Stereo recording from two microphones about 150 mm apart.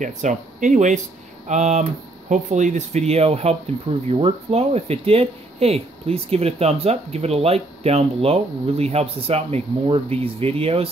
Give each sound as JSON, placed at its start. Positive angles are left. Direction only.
{"t": 0.0, "sound": "speech", "side_deg": -55}